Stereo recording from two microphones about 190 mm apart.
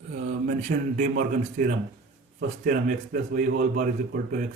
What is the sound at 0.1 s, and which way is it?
A man's voice, 45° right (ahead or behind).